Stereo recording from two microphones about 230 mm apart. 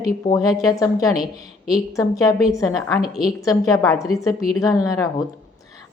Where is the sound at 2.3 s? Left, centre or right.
Centre.